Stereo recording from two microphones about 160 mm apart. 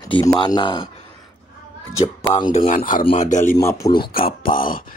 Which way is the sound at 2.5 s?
45° left (ahead or behind).